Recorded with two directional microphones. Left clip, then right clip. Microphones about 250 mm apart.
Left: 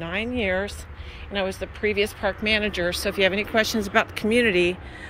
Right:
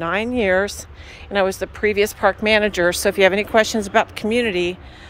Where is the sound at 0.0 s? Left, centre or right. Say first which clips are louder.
Right 7 dB; centre.